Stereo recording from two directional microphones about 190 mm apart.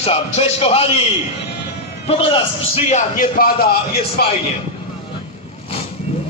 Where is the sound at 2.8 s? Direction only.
40° left (ahead or behind).